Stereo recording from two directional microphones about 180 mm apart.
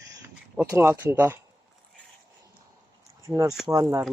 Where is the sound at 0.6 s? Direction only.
15° right (ahead or behind).